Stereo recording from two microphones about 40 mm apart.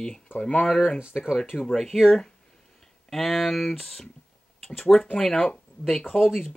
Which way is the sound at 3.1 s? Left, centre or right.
Centre.